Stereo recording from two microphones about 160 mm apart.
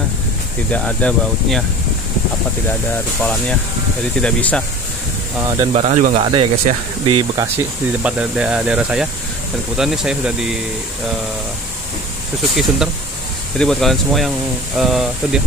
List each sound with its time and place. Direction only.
0.7 s speech: 10° left (ahead or behind)
4.2 s speech: 10° left (ahead or behind)
5.7 s speech: 45° right (ahead or behind)
6.2 s speech: 35° right (ahead or behind)
7.3 s speech: 10° right (ahead or behind)
12.5 s speech: 5° right (ahead or behind)